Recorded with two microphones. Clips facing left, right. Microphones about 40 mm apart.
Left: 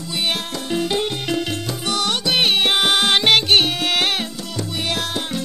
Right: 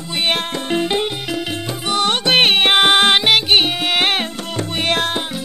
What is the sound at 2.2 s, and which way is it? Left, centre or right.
Music, right.